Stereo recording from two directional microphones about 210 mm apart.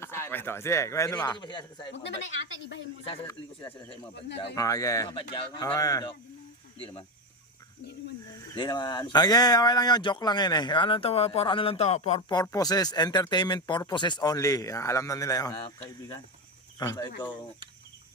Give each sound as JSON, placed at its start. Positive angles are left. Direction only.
{"t": 0.0, "sound": "a man's voice", "side_deg": 10}
{"t": 1.9, "sound": "speech", "side_deg": 60}
{"t": 3.2, "sound": "a man's voice", "side_deg": 20}
{"t": 8.5, "sound": "speech", "side_deg": 20}
{"t": 12.3, "sound": "speech", "side_deg": 20}
{"t": 16.7, "sound": "speech", "side_deg": 15}